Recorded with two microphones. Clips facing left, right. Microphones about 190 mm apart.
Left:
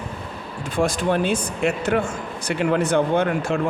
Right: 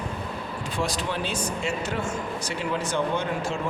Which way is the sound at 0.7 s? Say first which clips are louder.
Left 9 dB; 50° left (ahead or behind).